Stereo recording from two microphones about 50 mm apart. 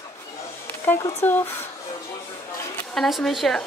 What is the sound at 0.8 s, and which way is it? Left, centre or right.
Speech, left.